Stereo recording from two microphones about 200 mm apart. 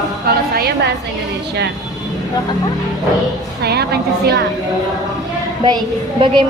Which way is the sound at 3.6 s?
55° right (ahead or behind).